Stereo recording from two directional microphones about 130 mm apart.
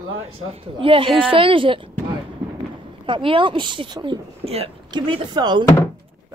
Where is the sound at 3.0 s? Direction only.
40° right (ahead or behind).